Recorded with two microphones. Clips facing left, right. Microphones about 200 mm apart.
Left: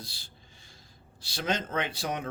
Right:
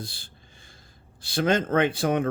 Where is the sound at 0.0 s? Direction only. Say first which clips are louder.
Right 7 dB; 50° right (ahead or behind).